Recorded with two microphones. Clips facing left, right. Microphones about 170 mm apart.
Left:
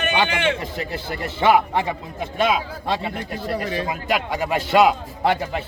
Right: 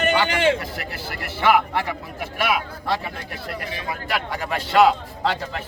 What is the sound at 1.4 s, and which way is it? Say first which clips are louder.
Speech: left 2 dB; 20° left (ahead or behind).